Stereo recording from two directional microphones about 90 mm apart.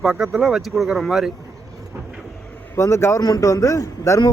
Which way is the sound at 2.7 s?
30° left (ahead or behind).